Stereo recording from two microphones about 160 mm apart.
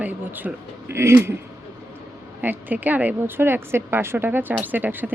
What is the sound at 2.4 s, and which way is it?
A woman's voice, 10° right (ahead or behind).